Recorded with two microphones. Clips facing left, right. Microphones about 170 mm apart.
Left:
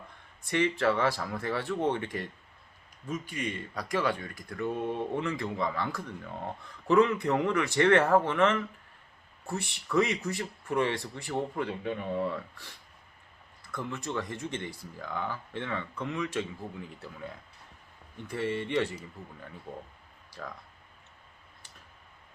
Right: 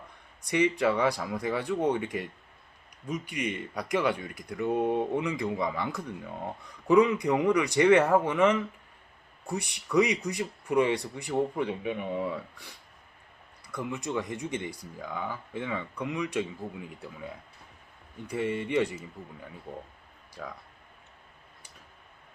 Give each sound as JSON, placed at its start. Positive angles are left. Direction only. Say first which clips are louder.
{"t": 0.5, "sound": "speech", "louder": "right 2 dB", "side_deg": -15}
{"t": 3.1, "sound": "speech", "louder": "right 2 dB", "side_deg": -20}
{"t": 13.7, "sound": "speech", "louder": "right 2 dB", "side_deg": -10}
{"t": 18.3, "sound": "speech", "louder": "right 2 dB", "side_deg": -10}
{"t": 20.4, "sound": "speech", "louder": "right 1 dB", "side_deg": -5}